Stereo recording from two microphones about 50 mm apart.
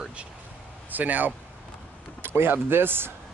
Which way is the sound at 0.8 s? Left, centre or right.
Right.